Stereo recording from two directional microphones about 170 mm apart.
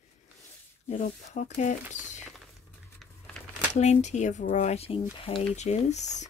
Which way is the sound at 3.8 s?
45° left (ahead or behind).